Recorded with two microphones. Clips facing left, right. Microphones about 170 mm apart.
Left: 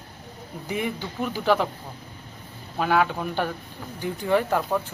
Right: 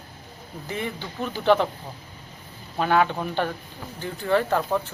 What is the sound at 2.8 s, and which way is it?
Speech, 5° left (ahead or behind).